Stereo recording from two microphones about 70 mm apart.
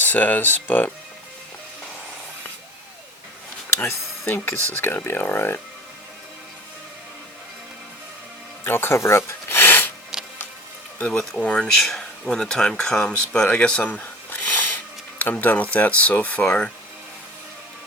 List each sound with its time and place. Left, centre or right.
0.0 s speech: left
3.8 s speech: left
8.6 s music: left
10.9 s speech: centre
14.0 s a sound: left
15.2 s speech: left